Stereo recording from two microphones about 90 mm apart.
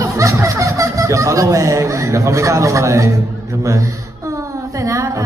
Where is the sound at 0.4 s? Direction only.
35° right (ahead or behind).